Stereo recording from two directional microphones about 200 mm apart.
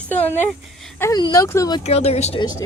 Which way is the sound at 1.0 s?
20° left (ahead or behind).